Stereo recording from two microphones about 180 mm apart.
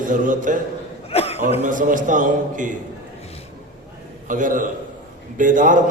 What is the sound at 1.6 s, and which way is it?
A man's voice, 45° right (ahead or behind).